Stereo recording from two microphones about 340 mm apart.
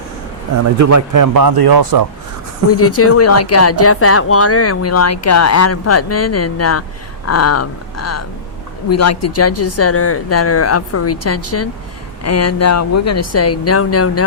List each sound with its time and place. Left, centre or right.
0.6 s speech: right
2.6 s speech: left